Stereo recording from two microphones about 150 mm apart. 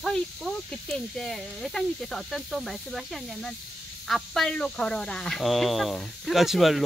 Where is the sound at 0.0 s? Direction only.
Centre (ahead or behind).